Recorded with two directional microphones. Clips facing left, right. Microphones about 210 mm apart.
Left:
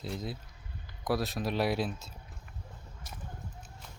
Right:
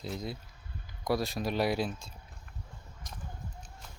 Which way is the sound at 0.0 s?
Centre (ahead or behind).